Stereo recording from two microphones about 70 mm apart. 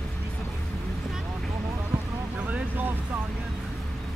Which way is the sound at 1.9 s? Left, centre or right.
Right.